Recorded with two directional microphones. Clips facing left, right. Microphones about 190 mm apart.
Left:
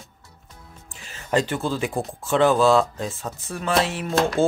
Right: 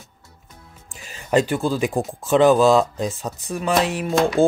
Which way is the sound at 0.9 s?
15° right (ahead or behind).